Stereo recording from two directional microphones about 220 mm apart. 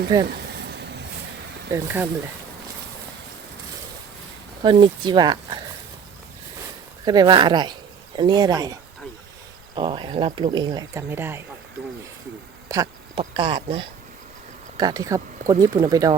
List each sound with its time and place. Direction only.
0.3 s a sound: 50° right (ahead or behind)
1.7 s speech: 10° right (ahead or behind)
4.6 s speech: 20° right (ahead or behind)
7.0 s speech: 20° right (ahead or behind)
12.6 s speech: 15° right (ahead or behind)